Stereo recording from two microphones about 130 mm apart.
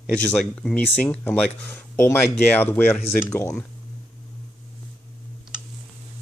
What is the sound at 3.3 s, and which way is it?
Speech, 20° left (ahead or behind).